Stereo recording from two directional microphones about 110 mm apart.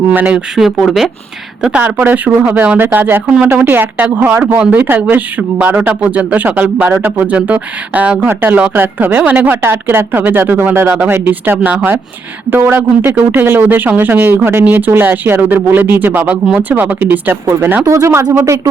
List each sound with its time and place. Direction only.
0.1 s speech: 15° right (ahead or behind)
0.5 s speech: 5° right (ahead or behind); by 18.7 s 25° right (ahead or behind)